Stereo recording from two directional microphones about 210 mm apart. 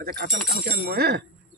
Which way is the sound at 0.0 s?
45° right (ahead or behind).